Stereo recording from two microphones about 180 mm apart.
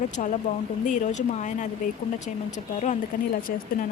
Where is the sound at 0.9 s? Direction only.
45° left (ahead or behind).